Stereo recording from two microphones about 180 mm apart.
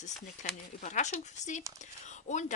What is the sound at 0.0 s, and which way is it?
Speech, 45° left (ahead or behind).